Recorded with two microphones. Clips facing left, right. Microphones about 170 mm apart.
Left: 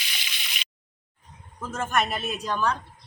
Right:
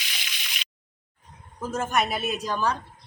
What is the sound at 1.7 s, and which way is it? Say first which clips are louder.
A man's voice: right 1 dB; 15° right (ahead or behind).